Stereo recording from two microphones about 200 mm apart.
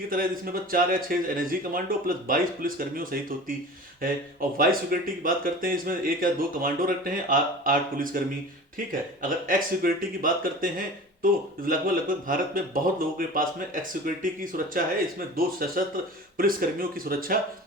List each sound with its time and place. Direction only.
0.1 s speech: 45° right (ahead or behind)